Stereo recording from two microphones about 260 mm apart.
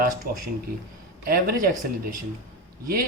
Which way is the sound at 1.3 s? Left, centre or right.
Right.